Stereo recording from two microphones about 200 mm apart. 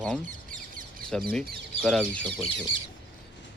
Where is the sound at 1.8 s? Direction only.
5° left (ahead or behind).